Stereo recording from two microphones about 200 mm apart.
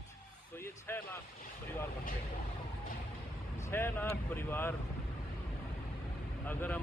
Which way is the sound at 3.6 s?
10° left (ahead or behind).